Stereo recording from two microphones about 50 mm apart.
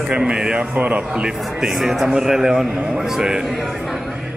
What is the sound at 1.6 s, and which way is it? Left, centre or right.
A man's voice, centre.